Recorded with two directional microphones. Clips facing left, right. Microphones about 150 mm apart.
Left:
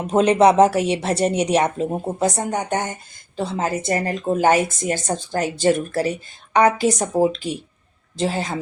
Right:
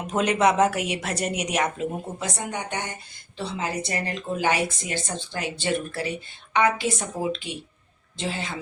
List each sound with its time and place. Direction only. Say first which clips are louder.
0.1 s speech: left 7 dB; 30° left (ahead or behind)